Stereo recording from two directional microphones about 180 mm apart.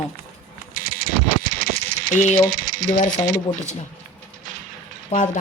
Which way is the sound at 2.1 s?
40° left (ahead or behind).